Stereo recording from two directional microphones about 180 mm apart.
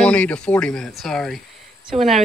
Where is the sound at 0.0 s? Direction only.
5° left (ahead or behind).